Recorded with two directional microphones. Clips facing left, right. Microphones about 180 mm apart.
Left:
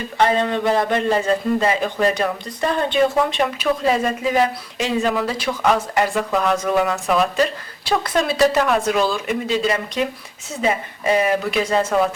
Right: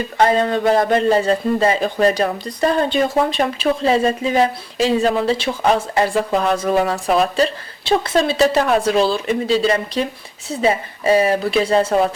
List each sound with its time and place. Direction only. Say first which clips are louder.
0.2 s a man's voice: right 2 dB; 40° right (ahead or behind)